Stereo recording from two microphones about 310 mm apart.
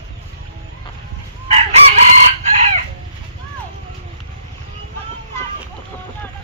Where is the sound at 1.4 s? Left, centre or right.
Right.